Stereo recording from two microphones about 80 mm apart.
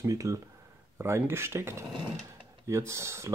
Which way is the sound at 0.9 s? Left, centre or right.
Right.